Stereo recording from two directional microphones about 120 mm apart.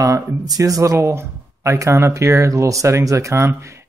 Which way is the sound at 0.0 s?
30° right (ahead or behind).